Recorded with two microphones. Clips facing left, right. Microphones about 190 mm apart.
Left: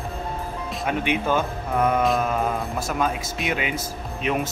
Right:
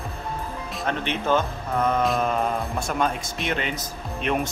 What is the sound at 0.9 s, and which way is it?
Speech, 10° left (ahead or behind).